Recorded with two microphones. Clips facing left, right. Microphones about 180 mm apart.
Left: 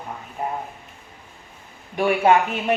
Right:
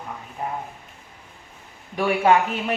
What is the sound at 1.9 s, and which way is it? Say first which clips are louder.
Speech: left 1 dB; 20° left (ahead or behind).